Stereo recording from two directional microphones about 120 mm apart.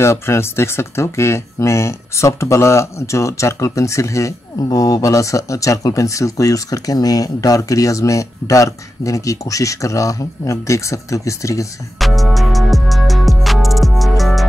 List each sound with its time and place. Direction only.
0.0 s speech: 20° left (ahead or behind)
12.0 s music: centre (ahead or behind)